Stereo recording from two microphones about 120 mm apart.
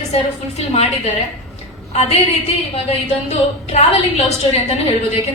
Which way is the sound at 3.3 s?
65° left (ahead or behind).